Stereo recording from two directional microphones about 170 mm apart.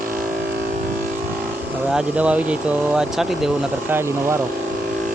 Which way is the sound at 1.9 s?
5° right (ahead or behind).